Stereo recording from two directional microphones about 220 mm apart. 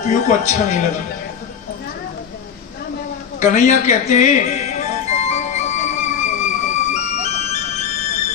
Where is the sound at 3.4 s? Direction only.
30° left (ahead or behind).